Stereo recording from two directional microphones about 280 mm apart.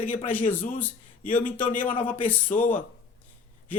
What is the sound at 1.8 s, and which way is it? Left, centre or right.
Speech, centre.